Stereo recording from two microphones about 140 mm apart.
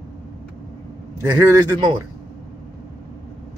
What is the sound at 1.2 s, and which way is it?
Speech, 25° right (ahead or behind).